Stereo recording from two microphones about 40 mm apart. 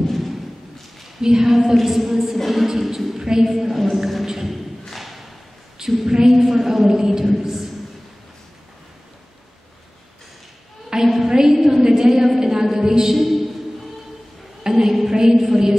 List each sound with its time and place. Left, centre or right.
0.0 s thump: centre
1.2 s a woman's voice: centre
4.8 s thump: centre
5.8 s a woman's voice: centre
10.9 s a sound: centre
12.7 s a woman's voice: centre
13.1 s a woman's voice: centre
14.6 s a sound: centre